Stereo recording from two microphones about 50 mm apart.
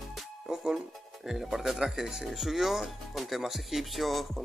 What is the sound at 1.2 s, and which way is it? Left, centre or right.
Speech, centre.